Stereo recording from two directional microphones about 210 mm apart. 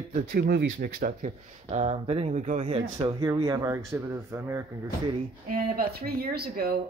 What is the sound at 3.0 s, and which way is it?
Speech, 20° right (ahead or behind).